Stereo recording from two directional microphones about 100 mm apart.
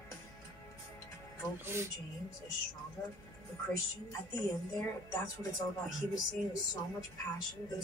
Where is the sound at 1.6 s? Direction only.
25° right (ahead or behind).